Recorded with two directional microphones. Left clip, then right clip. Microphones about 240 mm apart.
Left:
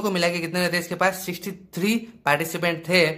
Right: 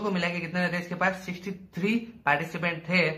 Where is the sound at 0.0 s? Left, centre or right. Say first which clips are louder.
Left 6 dB; left.